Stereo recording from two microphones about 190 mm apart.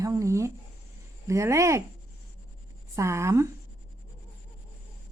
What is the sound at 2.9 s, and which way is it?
Speech, 15° right (ahead or behind).